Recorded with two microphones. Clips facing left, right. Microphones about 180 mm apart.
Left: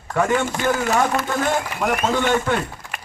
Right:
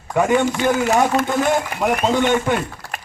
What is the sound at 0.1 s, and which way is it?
Speech, 15° right (ahead or behind).